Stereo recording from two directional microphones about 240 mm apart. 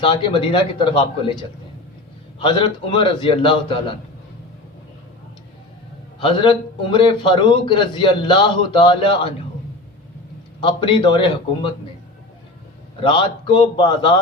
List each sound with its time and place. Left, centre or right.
0.0 s a man's voice: left
6.1 s a man's voice: centre
10.6 s a man's voice: centre
13.0 s a man's voice: left